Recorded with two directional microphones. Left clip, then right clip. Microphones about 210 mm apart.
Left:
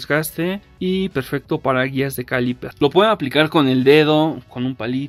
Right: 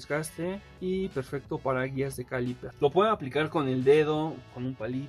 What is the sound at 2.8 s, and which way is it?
Speech, 50° left (ahead or behind).